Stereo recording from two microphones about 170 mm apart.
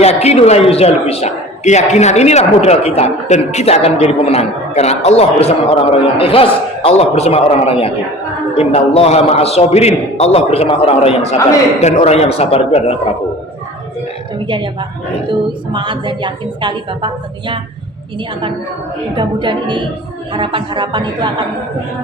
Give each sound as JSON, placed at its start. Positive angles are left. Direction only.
{"t": 0.0, "sound": "a man's voice", "side_deg": 40}
{"t": 14.4, "sound": "a woman's voice", "side_deg": -30}
{"t": 19.1, "sound": "a woman's voice", "side_deg": -30}